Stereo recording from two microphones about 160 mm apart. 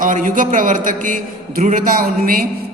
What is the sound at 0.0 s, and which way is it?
A man's voice, 55° right (ahead or behind).